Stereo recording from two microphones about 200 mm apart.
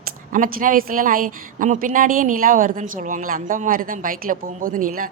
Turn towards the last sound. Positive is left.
turn(degrees=-45)  # may be behind; listen again after turning